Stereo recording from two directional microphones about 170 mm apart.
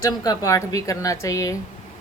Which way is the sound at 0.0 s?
20° left (ahead or behind).